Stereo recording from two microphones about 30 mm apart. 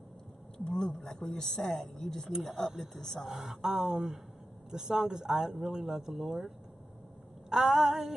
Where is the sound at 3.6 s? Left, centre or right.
Centre.